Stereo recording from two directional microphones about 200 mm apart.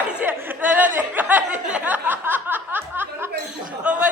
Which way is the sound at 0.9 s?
10° right (ahead or behind).